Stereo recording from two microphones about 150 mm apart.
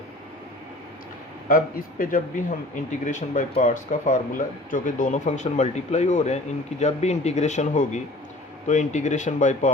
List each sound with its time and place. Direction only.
1.5 s speech: 65° left (ahead or behind)